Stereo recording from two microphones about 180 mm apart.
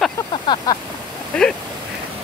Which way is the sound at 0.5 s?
25° left (ahead or behind).